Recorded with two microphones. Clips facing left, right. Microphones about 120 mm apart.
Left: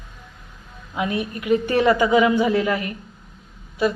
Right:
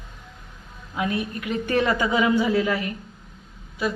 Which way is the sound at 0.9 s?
20° left (ahead or behind).